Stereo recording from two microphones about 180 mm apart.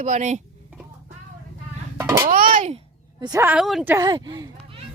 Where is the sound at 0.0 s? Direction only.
40° right (ahead or behind).